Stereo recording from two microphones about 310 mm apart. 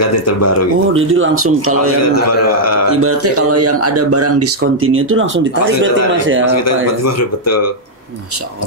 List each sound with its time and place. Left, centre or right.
0.0 s speech: left
0.9 s speech: right
2.2 s speech: left
3.0 s a man's voice: right
6.4 s speech: left